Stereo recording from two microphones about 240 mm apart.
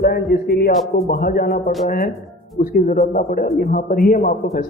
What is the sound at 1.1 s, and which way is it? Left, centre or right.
A man's voice, left.